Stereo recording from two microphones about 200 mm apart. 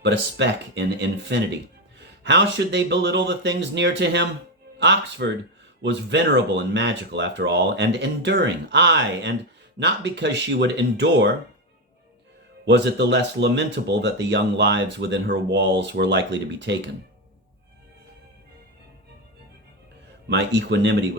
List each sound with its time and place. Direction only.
0.0 s speech: 60° right (ahead or behind)
12.6 s speech: 60° right (ahead or behind)
20.3 s speech: 60° right (ahead or behind)